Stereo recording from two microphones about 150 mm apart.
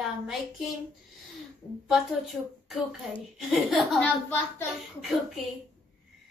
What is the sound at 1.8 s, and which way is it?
A woman's voice, centre (ahead or behind).